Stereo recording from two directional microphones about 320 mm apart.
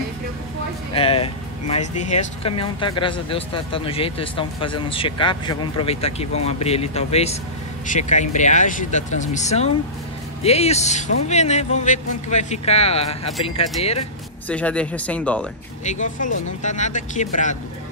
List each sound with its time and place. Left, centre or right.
0.9 s speech: centre
14.5 s speech: centre
15.8 s speech: left